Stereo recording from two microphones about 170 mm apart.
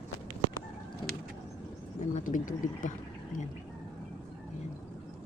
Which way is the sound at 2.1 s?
50° left (ahead or behind).